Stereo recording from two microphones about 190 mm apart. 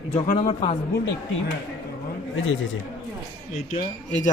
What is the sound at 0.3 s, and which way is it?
Speech, 30° left (ahead or behind).